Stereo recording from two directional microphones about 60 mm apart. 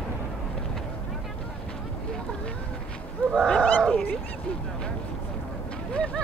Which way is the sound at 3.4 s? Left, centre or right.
Centre.